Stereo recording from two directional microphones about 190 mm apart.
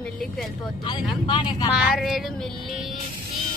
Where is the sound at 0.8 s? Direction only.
25° left (ahead or behind).